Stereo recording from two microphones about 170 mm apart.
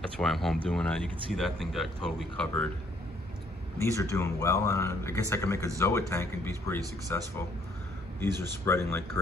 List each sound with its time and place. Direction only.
0.2 s speech: centre (ahead or behind)
3.7 s speech: 15° left (ahead or behind)